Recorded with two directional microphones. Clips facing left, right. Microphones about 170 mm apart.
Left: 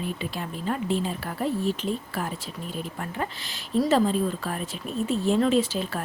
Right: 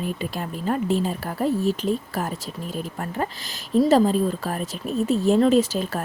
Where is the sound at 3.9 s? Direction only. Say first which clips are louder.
Right 3 dB; 40° right (ahead or behind).